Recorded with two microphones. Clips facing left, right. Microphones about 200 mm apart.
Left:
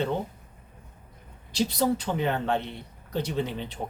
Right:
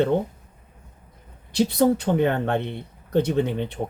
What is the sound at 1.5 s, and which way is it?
Speech, 55° right (ahead or behind).